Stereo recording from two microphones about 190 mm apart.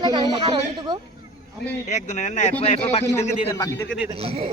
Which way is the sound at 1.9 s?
40° left (ahead or behind).